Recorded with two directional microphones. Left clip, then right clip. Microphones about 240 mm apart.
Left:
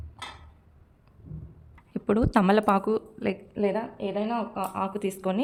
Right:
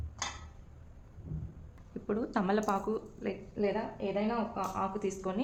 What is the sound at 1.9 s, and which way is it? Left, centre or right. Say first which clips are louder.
A woman's voice: left 10 dB; left.